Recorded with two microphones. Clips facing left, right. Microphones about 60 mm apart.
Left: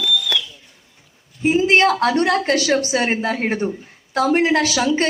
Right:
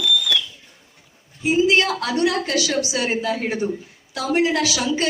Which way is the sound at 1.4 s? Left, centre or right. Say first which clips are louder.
Left 3 dB; left.